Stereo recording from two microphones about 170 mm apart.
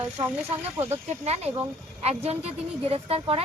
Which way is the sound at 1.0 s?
40° right (ahead or behind).